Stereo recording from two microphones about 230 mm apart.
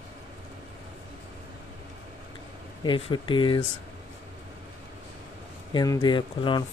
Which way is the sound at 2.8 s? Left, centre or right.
Left.